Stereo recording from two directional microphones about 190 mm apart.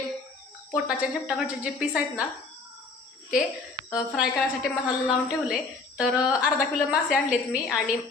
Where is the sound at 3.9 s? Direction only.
Centre (ahead or behind).